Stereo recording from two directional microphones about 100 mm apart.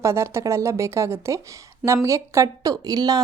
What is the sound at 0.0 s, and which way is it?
A woman's voice, 25° right (ahead or behind).